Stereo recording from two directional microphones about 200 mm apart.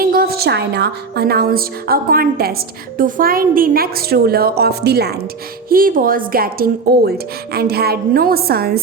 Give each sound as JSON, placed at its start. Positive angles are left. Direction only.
{"t": 0.0, "sound": "speech", "side_deg": -45}